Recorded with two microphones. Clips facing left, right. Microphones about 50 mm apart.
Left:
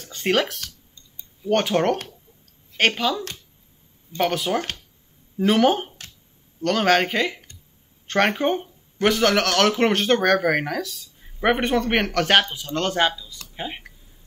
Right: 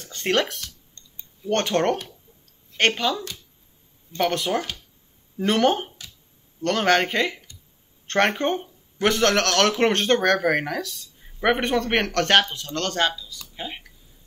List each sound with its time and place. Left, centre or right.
0.0 s speech: centre; by 13.8 s left